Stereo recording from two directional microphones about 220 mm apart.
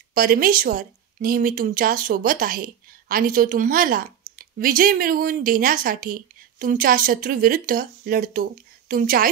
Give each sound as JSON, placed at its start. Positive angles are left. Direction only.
{"t": 0.1, "sound": "a woman's voice", "side_deg": -40}